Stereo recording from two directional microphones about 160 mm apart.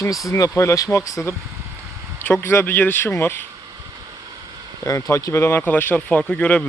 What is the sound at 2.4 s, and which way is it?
Speech, 15° left (ahead or behind).